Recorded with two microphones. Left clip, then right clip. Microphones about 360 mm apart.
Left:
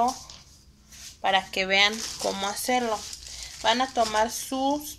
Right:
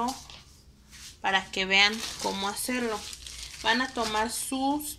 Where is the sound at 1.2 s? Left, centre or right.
Centre.